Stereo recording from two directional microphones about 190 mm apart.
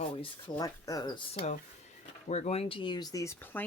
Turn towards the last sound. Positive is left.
turn(degrees=10)  # may be behind; listen again after turning